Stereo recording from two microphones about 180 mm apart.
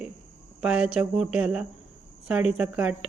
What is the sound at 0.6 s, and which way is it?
A woman's voice, 5° right (ahead or behind).